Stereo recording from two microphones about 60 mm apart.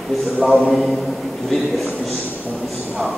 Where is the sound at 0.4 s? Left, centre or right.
Centre.